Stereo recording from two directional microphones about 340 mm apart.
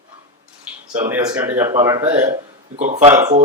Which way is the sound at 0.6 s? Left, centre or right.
Centre.